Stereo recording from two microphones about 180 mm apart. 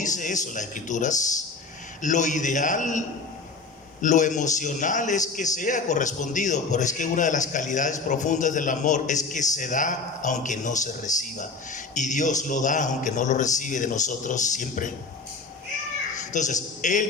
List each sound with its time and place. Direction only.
0.0 s a man's voice: 45° left (ahead or behind)
4.0 s a man's voice: 45° left (ahead or behind)
16.3 s a man's voice: 45° left (ahead or behind)